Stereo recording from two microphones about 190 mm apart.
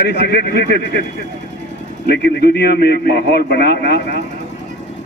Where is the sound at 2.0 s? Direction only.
60° left (ahead or behind).